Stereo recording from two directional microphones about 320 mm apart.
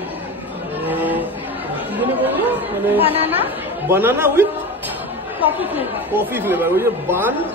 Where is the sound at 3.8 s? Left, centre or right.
Centre.